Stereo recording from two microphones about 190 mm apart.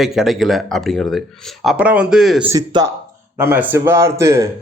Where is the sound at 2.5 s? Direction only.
20° right (ahead or behind).